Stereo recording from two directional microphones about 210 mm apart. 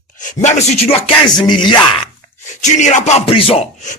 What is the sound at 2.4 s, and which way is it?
Speech, 35° left (ahead or behind).